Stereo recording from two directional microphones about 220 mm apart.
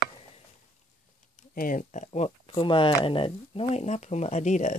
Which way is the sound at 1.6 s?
35° left (ahead or behind).